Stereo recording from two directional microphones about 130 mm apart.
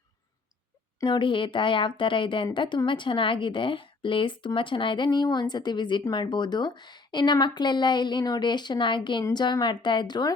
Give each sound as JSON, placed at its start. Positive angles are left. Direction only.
{"t": 1.0, "sound": "a woman's voice", "side_deg": 40}